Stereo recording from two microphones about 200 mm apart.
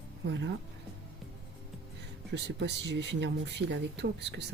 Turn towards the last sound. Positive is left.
turn(degrees=-60)  # may be behind; listen again after turning